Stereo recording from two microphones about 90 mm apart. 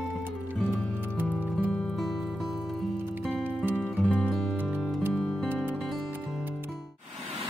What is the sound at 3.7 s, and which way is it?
Music, 15° left (ahead or behind).